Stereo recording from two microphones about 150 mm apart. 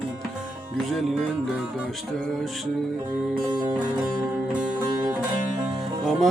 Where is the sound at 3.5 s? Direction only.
30° right (ahead or behind).